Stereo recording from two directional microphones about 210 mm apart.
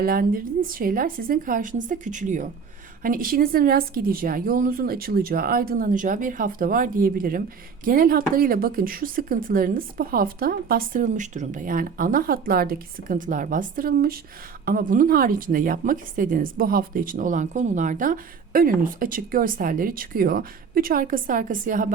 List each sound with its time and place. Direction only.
0.0 s a woman's voice: 45° right (ahead or behind)